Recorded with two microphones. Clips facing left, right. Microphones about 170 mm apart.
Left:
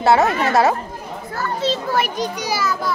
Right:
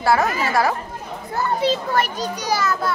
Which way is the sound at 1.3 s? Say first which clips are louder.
Right 2 dB; 20° right (ahead or behind).